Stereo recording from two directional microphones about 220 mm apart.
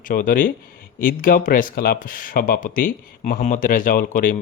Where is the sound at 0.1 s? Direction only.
40° left (ahead or behind).